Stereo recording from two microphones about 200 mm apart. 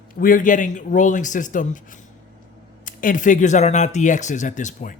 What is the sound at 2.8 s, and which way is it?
Speech, 40° left (ahead or behind).